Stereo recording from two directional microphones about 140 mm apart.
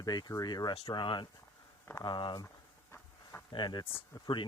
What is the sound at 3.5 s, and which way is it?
Speech, 30° left (ahead or behind).